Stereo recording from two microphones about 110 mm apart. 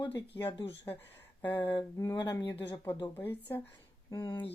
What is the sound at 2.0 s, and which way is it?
Speech, 30° left (ahead or behind).